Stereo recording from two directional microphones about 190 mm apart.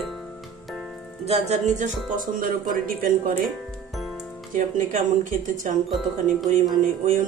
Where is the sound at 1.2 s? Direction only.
35° right (ahead or behind).